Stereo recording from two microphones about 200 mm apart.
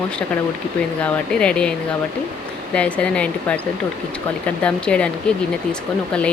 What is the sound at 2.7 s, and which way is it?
Speech, 5° left (ahead or behind).